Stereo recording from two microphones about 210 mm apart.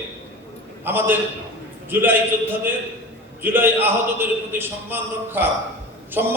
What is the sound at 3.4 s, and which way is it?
A man's voice, 10° right (ahead or behind).